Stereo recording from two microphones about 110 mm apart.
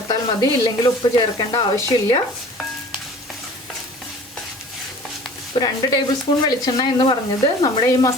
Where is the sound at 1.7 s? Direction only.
30° left (ahead or behind).